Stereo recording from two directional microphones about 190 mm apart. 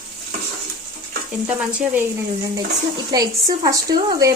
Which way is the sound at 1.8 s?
10° right (ahead or behind).